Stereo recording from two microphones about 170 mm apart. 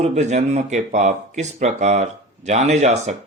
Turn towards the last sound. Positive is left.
turn(degrees=-40)  # may be behind; listen again after turning